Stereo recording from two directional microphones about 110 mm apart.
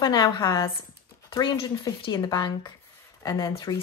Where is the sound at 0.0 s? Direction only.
40° left (ahead or behind).